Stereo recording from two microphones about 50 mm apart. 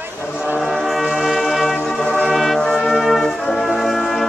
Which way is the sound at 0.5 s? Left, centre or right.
Centre.